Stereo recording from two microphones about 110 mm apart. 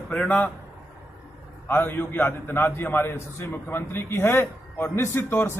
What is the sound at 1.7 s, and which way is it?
A man's voice, 20° left (ahead or behind).